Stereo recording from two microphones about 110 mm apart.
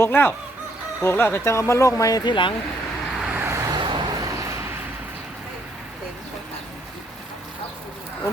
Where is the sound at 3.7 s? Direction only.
45° right (ahead or behind).